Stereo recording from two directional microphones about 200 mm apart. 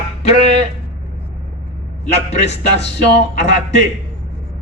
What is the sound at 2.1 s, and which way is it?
Speech, 35° left (ahead or behind).